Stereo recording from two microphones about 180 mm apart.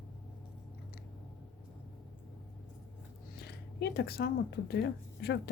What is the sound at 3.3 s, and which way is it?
Speech, 65° left (ahead or behind).